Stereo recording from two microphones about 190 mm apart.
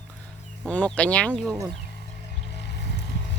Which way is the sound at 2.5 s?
60° left (ahead or behind).